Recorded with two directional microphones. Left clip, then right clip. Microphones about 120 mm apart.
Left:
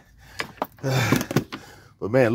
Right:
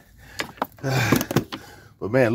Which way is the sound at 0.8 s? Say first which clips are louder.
Right 1 dB; 15° left (ahead or behind).